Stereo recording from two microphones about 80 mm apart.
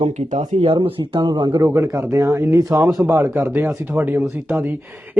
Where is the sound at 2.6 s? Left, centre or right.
Right.